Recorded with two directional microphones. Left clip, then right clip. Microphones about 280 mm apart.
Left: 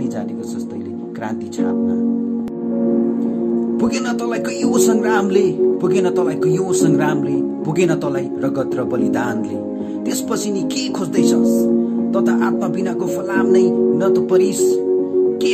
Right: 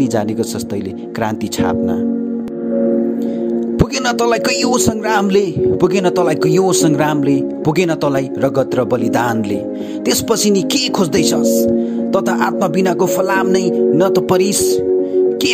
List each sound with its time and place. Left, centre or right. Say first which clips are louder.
1.6 s music: right 3 dB; right
3.7 s music: right 4 dB; right